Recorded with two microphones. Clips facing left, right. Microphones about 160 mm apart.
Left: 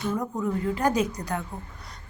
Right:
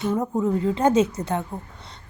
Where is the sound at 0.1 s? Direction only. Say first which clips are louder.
Right 6 dB; 25° right (ahead or behind).